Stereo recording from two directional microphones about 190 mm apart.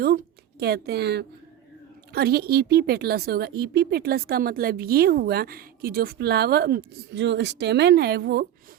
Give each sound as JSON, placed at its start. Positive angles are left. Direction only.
{"t": 0.6, "sound": "a woman's voice", "side_deg": -60}